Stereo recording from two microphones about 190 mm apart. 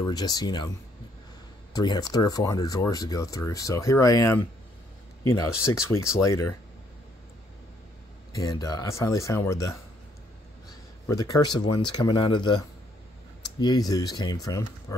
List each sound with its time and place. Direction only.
0.0 s speech: 20° left (ahead or behind)
1.7 s speech: 20° left (ahead or behind)
8.3 s speech: 20° left (ahead or behind)
13.6 s speech: 20° left (ahead or behind)